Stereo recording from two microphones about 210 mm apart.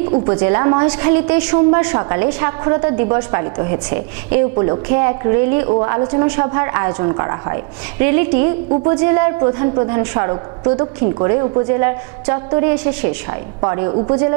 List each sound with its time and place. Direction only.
0.1 s a woman's voice: 25° right (ahead or behind)
1.5 s a woman's voice: 20° right (ahead or behind)